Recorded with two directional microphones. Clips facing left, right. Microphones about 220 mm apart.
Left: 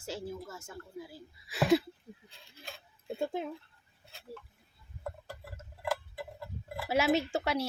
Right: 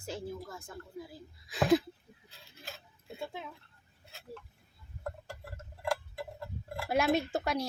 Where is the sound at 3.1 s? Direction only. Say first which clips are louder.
Left 7 dB; 45° left (ahead or behind).